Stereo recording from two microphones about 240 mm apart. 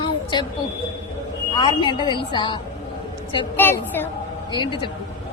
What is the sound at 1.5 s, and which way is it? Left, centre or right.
A woman's voice, centre.